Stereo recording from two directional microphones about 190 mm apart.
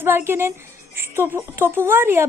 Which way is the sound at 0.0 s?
10° right (ahead or behind).